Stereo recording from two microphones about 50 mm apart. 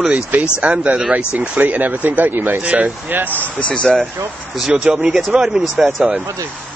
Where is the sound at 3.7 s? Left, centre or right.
Left.